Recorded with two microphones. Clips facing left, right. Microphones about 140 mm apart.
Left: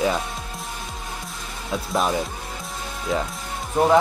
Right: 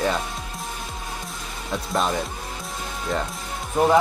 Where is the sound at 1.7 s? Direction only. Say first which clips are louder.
Left 1 dB; centre (ahead or behind).